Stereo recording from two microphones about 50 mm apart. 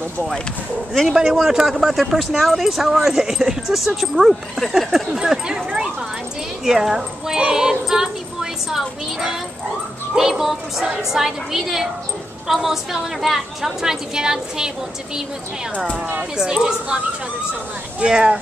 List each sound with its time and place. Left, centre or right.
1.3 s speech: centre
6.6 s a woman's voice: centre
16.3 s a woman's voice: centre
18.0 s speech: right